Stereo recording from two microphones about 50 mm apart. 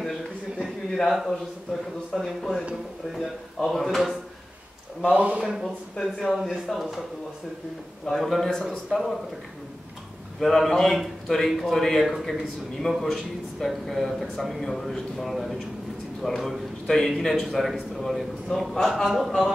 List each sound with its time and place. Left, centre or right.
0.8 s speech: centre
5.0 s a man's voice: right
5.6 s speech: centre
8.1 s speech: centre
10.4 s a man's voice: centre